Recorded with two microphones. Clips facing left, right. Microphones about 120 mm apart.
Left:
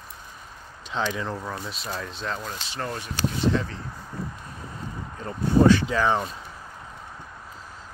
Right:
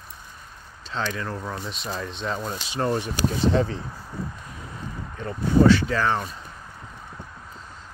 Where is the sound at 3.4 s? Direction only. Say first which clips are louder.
Right 3 dB; 35° right (ahead or behind).